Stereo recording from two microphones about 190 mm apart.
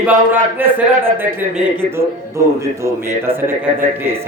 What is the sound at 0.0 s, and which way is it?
Speech, 10° right (ahead or behind).